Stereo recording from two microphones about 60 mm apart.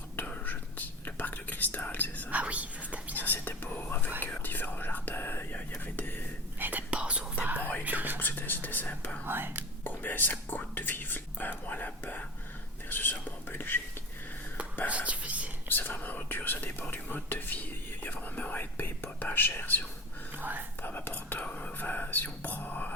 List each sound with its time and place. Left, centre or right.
0.4 s whispering: left
2.3 s whispering: right
3.2 s whispering: left
6.6 s whispering: right
6.9 s whispering: centre
7.4 s whispering: right
8.2 s whispering: left
9.2 s whispering: right
9.8 s whispering: left
14.8 s whispering: right
15.7 s whispering: left
20.3 s whispering: right
20.8 s whispering: left